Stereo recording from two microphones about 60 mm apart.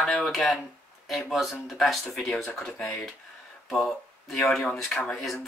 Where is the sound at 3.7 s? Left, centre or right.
Centre.